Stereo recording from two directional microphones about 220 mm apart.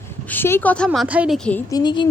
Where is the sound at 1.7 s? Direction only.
20° left (ahead or behind).